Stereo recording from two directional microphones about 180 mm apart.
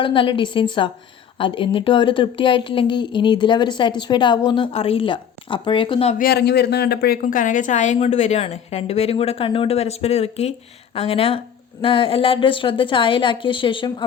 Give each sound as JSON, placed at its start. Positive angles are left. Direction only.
{"t": 0.0, "sound": "speech", "side_deg": 30}
{"t": 6.1, "sound": "a woman's voice", "side_deg": 60}